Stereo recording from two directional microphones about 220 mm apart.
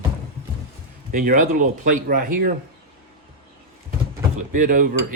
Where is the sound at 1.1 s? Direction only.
40° right (ahead or behind).